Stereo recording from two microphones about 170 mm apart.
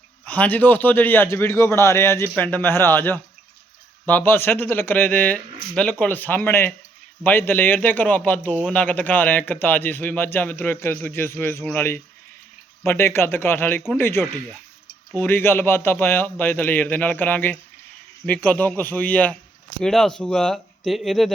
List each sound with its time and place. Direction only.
0.3 s a man's voice: 10° left (ahead or behind)